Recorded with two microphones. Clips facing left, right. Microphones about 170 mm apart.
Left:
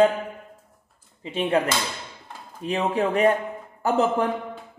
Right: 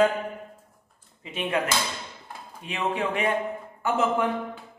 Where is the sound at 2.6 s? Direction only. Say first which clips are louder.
Left 5 dB; 40° left (ahead or behind).